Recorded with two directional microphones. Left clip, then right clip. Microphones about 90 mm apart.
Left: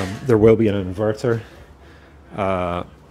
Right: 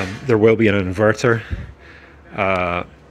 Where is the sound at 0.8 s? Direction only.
45° right (ahead or behind).